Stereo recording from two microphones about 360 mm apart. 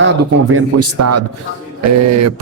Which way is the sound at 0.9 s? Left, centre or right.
Right.